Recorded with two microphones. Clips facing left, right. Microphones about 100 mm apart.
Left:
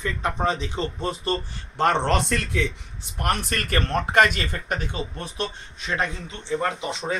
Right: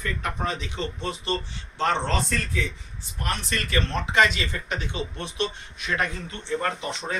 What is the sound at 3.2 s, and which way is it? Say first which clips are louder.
Speech: left 4 dB; 55° left (ahead or behind).